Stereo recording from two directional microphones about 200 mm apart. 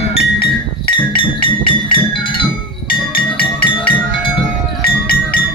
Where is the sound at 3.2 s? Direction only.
50° left (ahead or behind).